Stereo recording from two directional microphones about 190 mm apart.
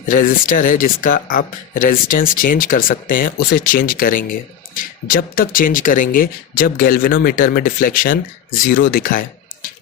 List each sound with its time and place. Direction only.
0.1 s speech: 45° left (ahead or behind)